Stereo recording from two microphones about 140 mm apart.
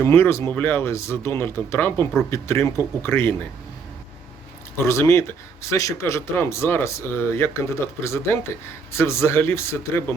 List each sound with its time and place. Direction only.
0.0 s speech: 15° left (ahead or behind)
4.9 s speech: 20° left (ahead or behind)